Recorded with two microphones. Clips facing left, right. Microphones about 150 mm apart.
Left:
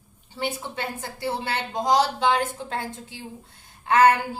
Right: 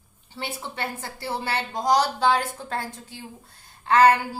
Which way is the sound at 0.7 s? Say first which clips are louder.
Left 1 dB; 20° left (ahead or behind).